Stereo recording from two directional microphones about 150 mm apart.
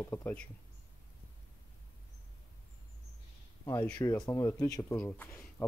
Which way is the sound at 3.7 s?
10° left (ahead or behind).